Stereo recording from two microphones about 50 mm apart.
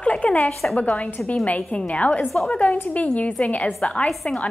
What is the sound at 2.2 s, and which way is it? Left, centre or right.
Speech, centre.